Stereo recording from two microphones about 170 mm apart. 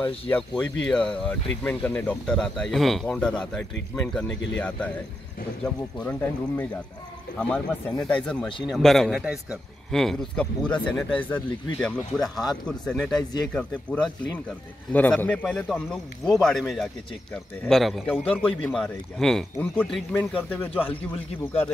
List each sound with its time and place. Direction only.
0.0 s speech: 10° left (ahead or behind)
4.3 s speech: 90° left
4.6 s a man's voice: 10° left (ahead or behind)
5.9 s a man's voice: 10° left (ahead or behind)